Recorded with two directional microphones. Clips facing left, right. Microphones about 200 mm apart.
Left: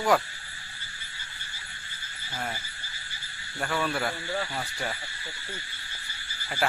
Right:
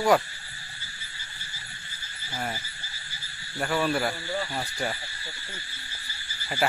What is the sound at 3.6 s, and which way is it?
Speech, 5° right (ahead or behind).